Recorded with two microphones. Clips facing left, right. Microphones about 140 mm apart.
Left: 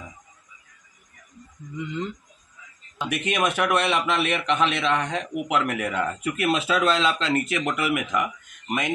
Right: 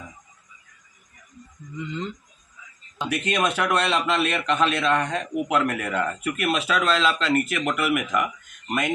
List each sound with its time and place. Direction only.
1.8 s a man's voice: 10° left (ahead or behind)